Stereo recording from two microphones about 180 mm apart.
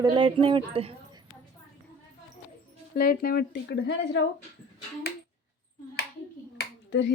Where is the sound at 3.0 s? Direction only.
55° left (ahead or behind); by 4.2 s 75° left (ahead or behind).